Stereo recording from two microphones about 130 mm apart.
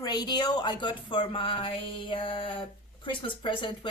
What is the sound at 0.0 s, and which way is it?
Speech, 35° left (ahead or behind).